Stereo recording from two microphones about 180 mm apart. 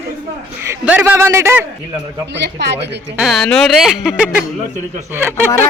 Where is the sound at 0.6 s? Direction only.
10° right (ahead or behind).